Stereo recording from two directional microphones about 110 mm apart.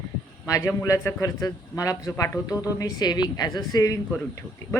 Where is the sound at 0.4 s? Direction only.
30° left (ahead or behind).